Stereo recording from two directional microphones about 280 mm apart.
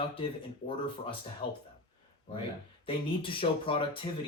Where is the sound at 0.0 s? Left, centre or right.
Centre.